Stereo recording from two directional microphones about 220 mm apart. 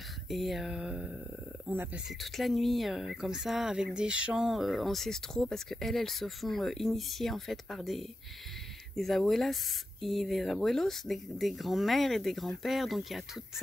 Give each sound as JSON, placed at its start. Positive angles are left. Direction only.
{"t": 0.3, "sound": "speech", "side_deg": 0}